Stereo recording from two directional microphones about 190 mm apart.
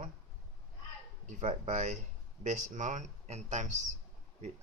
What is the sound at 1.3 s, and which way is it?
Speech, 40° right (ahead or behind).